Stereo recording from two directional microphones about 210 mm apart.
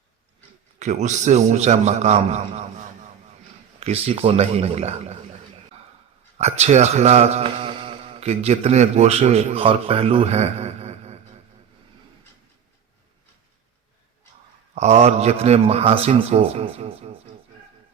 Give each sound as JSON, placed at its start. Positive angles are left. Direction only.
{"t": 0.8, "sound": "a man's voice", "side_deg": -35}
{"t": 6.3, "sound": "speech", "side_deg": -30}
{"t": 14.8, "sound": "speech", "side_deg": -30}